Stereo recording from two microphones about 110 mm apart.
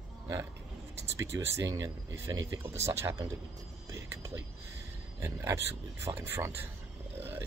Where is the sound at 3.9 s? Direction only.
25° right (ahead or behind).